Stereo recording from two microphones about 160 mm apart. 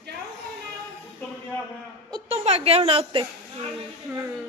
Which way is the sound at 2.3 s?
40° right (ahead or behind).